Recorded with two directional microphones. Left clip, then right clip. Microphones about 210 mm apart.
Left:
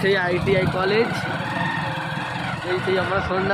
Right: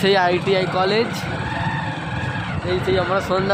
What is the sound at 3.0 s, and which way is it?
Speech, 20° right (ahead or behind).